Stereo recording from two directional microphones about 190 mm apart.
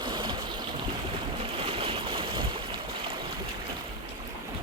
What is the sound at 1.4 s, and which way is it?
Boat, 30° right (ahead or behind).